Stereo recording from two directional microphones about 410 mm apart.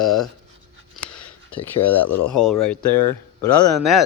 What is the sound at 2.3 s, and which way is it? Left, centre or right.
Speech, centre.